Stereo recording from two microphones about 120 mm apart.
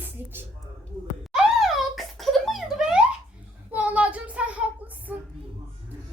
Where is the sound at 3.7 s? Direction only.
10° right (ahead or behind).